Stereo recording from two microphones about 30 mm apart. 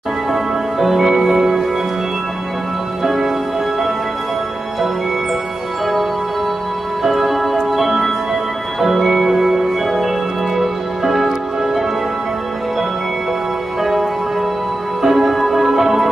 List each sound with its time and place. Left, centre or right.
0.3 s music: centre
3.0 s music: centre
7.0 s music: centre
10.6 s music: centre
15.0 s music: centre